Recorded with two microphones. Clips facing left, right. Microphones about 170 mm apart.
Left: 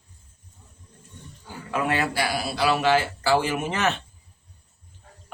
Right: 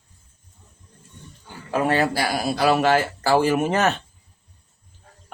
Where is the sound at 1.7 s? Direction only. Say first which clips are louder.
Right 4 dB; 35° right (ahead or behind).